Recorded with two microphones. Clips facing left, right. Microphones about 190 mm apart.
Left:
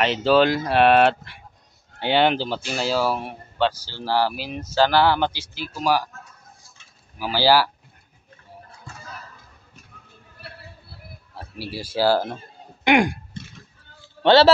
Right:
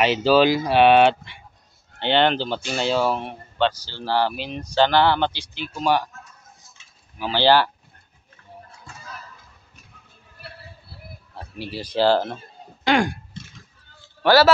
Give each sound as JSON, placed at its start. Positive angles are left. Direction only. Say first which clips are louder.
{"t": 0.0, "sound": "speech", "louder": "right 1 dB", "side_deg": -5}
{"t": 7.2, "sound": "speech", "louder": "right 1 dB", "side_deg": 5}
{"t": 11.5, "sound": "speech", "louder": "right 2 dB", "side_deg": 10}
{"t": 12.8, "sound": "throat clearing", "louder": "left 2 dB", "side_deg": 20}
{"t": 14.2, "sound": "a man's voice", "louder": "left 1 dB", "side_deg": 25}